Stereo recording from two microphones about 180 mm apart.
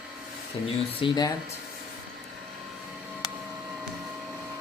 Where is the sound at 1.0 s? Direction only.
30° left (ahead or behind).